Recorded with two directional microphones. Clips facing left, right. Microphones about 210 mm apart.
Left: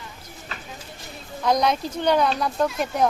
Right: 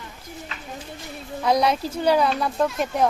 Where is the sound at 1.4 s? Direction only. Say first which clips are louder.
Right 1 dB; 5° right (ahead or behind).